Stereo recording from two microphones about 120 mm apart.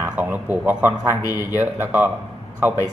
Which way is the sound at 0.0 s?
15° right (ahead or behind).